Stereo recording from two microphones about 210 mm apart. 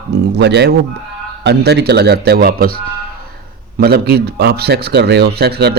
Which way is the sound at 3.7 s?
50° right (ahead or behind).